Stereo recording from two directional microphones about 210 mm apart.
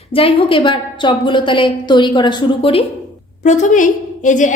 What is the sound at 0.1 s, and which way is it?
A woman's voice, 25° left (ahead or behind).